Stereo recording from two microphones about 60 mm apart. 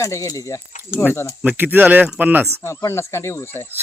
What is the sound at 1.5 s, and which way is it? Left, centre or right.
Speech, right.